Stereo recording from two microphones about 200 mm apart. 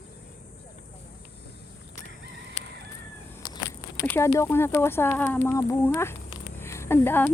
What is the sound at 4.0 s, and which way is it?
Speech, 15° left (ahead or behind).